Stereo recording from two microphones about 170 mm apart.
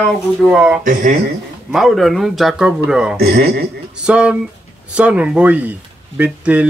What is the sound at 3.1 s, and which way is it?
Speech, 70° right (ahead or behind).